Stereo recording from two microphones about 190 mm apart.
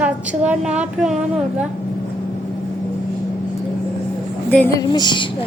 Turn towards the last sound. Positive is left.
turn(degrees=25)  # may be behind; listen again after turning